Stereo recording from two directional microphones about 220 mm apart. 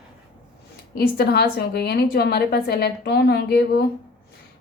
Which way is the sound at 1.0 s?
45° left (ahead or behind).